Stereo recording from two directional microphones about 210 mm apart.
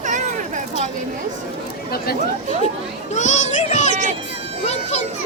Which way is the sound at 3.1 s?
35° left (ahead or behind).